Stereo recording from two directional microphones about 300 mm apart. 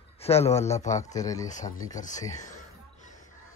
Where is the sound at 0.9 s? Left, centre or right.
Centre.